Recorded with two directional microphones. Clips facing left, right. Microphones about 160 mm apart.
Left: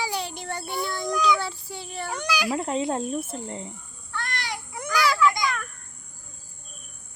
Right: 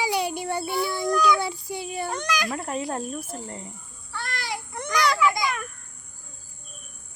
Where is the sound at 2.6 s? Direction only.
20° left (ahead or behind).